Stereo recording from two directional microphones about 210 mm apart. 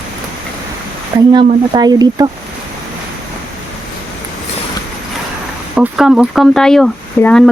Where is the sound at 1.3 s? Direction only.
20° right (ahead or behind).